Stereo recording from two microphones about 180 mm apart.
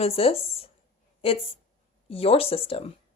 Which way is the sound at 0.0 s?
30° left (ahead or behind).